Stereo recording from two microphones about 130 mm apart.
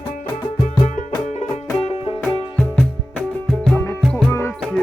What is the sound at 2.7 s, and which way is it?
Music, 5° left (ahead or behind).